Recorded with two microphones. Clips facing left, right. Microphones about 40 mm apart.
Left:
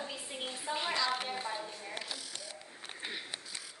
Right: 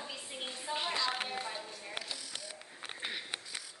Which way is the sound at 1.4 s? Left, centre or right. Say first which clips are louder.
Left 2 dB; centre.